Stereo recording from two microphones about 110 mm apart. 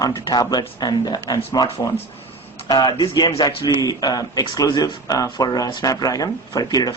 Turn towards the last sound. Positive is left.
turn(degrees=35)  # may be behind; listen again after turning